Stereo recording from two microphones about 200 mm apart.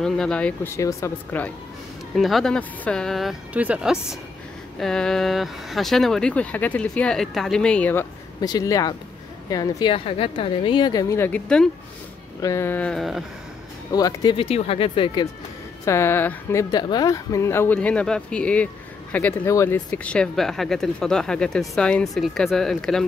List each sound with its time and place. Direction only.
0.0 s a woman's voice: 5° left (ahead or behind)
2.1 s a woman's voice: centre (ahead or behind)
12.4 s a woman's voice: 15° left (ahead or behind)
13.9 s a woman's voice: 20° left (ahead or behind)
15.8 s a woman's voice: 15° left (ahead or behind)